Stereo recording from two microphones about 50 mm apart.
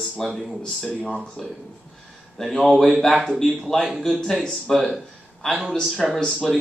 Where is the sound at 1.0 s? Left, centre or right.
Centre.